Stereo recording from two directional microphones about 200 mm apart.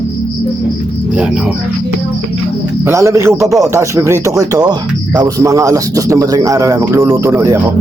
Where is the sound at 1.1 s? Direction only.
5° right (ahead or behind).